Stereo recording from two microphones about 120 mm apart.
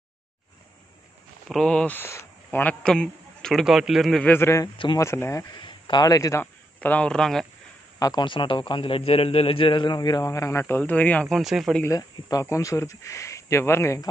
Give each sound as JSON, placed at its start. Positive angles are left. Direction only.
{"t": 1.5, "sound": "speech", "side_deg": 5}
{"t": 4.3, "sound": "speech", "side_deg": 20}
{"t": 5.6, "sound": "a man's voice", "side_deg": 40}
{"t": 6.4, "sound": "speech", "side_deg": 15}
{"t": 8.0, "sound": "a man's voice", "side_deg": 30}
{"t": 8.3, "sound": "a man's voice", "side_deg": 45}
{"t": 11.8, "sound": "speech", "side_deg": 30}